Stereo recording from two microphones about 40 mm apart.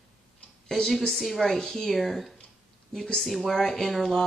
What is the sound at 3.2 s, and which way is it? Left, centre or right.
Speech, centre.